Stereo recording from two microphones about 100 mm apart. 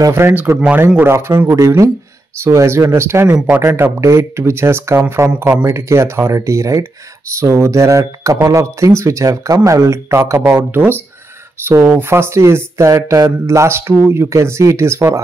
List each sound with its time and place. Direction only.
0.1 s speech: 20° right (ahead or behind)
3.3 s speech: 10° right (ahead or behind)
3.6 s speech: 25° right (ahead or behind)